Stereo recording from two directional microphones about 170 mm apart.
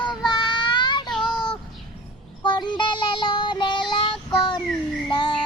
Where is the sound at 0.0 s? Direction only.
25° left (ahead or behind).